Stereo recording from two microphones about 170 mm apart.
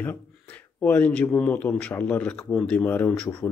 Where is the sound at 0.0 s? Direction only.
10° left (ahead or behind).